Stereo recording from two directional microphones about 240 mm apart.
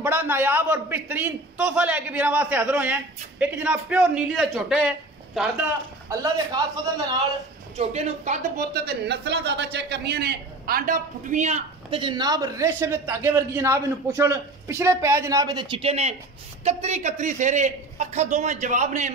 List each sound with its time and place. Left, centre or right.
0.0 s a man's voice: centre
7.7 s speech: right